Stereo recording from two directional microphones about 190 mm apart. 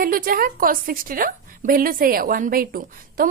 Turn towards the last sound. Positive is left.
turn(degrees=-45)  # may be behind; listen again after turning